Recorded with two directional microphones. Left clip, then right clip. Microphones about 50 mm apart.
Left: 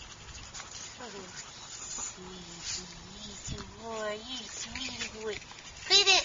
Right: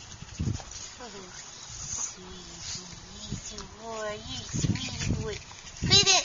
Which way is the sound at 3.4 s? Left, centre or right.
Centre.